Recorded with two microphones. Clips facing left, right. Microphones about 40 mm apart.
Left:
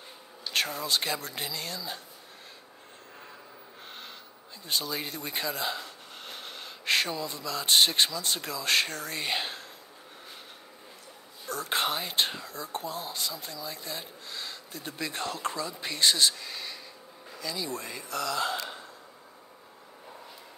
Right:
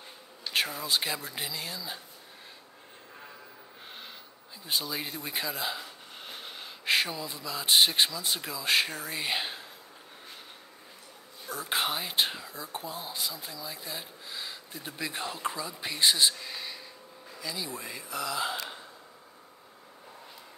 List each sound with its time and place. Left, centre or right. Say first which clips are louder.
0.5 s speech: even; centre
4.6 s speech: left 1 dB; centre
11.4 s speech: left 1 dB; centre